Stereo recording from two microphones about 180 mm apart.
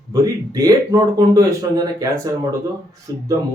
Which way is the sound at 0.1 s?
20° right (ahead or behind).